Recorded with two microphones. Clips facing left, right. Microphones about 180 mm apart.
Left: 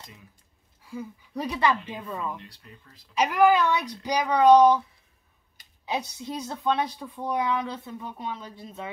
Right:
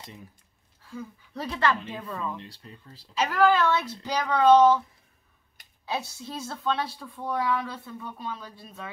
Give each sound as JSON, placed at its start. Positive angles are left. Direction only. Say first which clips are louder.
{"t": 0.8, "sound": "speech", "louder": "left 2 dB", "side_deg": 10}
{"t": 2.4, "sound": "speech", "louder": "right 3 dB", "side_deg": -30}
{"t": 3.2, "sound": "speech", "louder": "left 2 dB", "side_deg": 15}
{"t": 5.9, "sound": "a woman's voice", "louder": "left 2 dB", "side_deg": 20}